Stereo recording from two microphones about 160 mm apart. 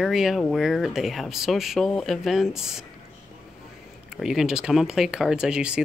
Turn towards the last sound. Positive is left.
turn(degrees=-5)  # may be behind; listen again after turning